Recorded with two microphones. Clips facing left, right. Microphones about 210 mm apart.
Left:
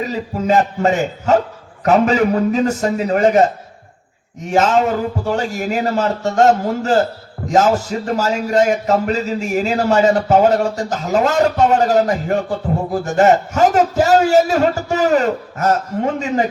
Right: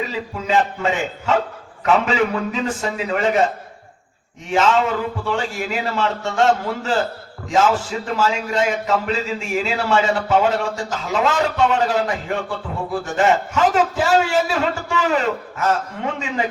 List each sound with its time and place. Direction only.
0.0 s a man's voice: 45° left (ahead or behind)